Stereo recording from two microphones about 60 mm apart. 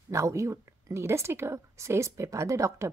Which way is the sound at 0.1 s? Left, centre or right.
Right.